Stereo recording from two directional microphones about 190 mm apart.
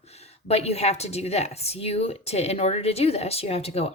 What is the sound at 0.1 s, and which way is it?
Speech, 35° left (ahead or behind).